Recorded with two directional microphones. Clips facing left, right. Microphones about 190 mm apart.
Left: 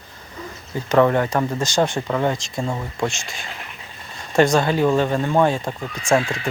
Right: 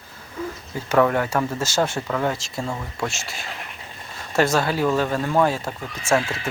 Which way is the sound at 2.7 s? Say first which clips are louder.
Left 4 dB; 15° left (ahead or behind).